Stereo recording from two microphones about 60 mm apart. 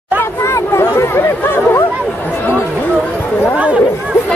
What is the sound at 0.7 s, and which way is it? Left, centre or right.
Chatter, left.